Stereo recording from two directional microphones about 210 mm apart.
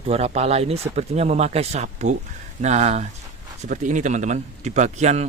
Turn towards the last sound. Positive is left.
turn(degrees=-35)  # may be behind; listen again after turning